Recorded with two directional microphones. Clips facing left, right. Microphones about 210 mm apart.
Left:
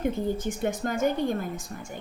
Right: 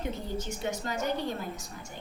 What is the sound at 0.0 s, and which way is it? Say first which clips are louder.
A woman's voice: left 8 dB; 55° left (ahead or behind).